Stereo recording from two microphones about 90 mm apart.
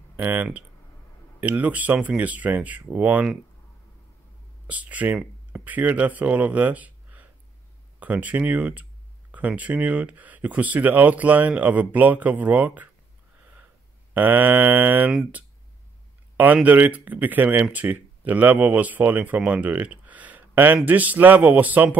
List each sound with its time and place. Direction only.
0.1 s speech: 20° right (ahead or behind)
4.6 s speech: 15° right (ahead or behind)
14.1 s speech: 20° right (ahead or behind)
16.6 s speech: 20° right (ahead or behind)